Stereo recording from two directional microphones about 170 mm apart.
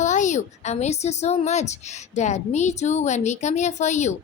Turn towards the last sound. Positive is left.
turn(degrees=45)  # may be behind; listen again after turning